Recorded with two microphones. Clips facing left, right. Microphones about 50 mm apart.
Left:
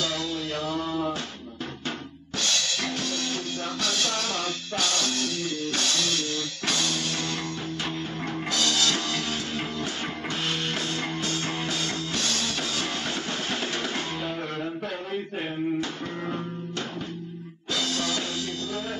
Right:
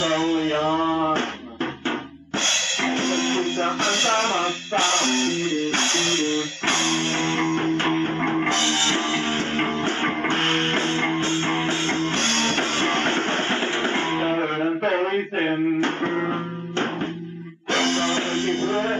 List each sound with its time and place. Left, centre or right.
0.0 s a sound: right
1.9 s drum kit: right
14.8 s music: right